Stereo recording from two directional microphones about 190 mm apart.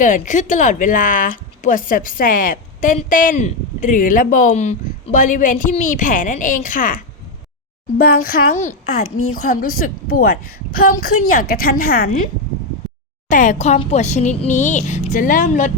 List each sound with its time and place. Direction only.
0.0 s speech: 40° left (ahead or behind)
9.0 s a woman's voice: 90° left
9.3 s speech: 50° left (ahead or behind)
13.2 s speech: 45° left (ahead or behind)